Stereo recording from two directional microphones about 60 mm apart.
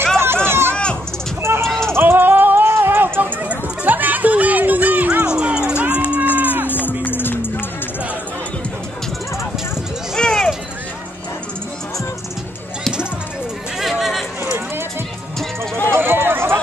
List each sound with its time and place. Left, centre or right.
0.2 s run: right
1.4 s a sound: right
1.7 s a sound: centre
2.0 s music: right
2.7 s run: right
3.8 s music: right
5.3 s music: centre
6.3 s a sound: right
7.1 s music: left
10.1 s a sound: centre
13.7 s chatter: centre
15.9 s run: right